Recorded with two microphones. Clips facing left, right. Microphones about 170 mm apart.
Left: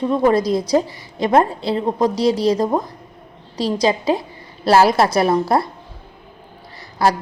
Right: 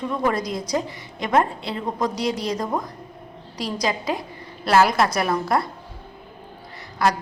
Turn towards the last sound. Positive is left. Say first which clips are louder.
# left 4 dB
turn(degrees=30)  # may be behind; listen again after turning